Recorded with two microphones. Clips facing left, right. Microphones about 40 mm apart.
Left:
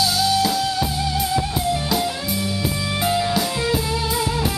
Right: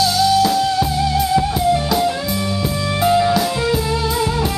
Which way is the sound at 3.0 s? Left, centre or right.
Centre.